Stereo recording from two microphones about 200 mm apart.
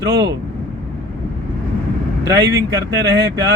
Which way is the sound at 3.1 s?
60° right (ahead or behind).